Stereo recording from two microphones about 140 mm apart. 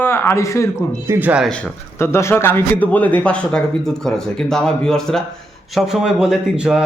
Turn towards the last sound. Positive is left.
turn(degrees=-5)  # may be behind; listen again after turning